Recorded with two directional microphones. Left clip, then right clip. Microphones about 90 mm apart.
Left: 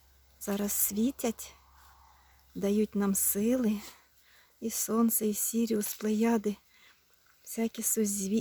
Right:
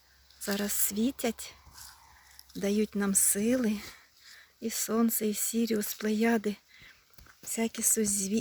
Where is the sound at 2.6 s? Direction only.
20° left (ahead or behind).